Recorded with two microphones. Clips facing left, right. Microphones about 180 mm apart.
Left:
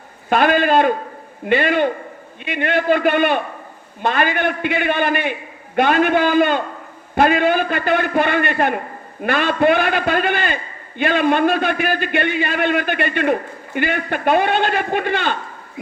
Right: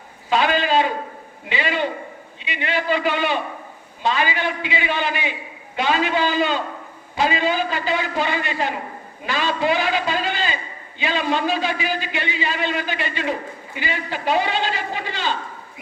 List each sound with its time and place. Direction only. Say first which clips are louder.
0.3 s a man's voice: left 4 dB; 55° left (ahead or behind)